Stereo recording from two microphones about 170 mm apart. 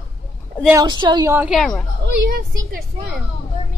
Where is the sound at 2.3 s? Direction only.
60° right (ahead or behind).